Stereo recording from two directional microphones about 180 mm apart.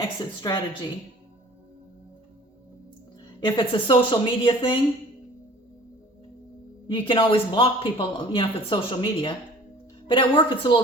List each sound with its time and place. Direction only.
0.4 s speech: 20° left (ahead or behind)
3.4 s speech: 30° left (ahead or behind)
6.8 s speech: 30° left (ahead or behind)